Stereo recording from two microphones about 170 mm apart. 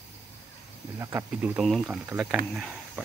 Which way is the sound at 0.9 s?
15° right (ahead or behind).